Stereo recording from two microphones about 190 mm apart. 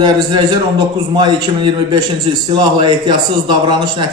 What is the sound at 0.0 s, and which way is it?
A man's voice, 25° right (ahead or behind).